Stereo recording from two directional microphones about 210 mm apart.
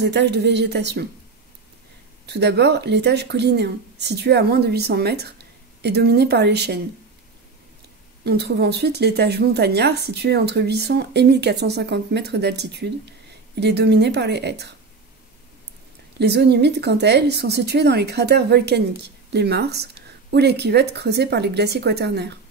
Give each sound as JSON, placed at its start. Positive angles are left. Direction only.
{"t": 0.0, "sound": "speech", "side_deg": -55}
{"t": 2.2, "sound": "speech", "side_deg": -55}
{"t": 8.2, "sound": "speech", "side_deg": -50}
{"t": 16.2, "sound": "speech", "side_deg": -55}